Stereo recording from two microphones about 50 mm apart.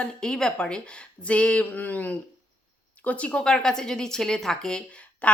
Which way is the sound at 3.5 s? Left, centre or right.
Centre.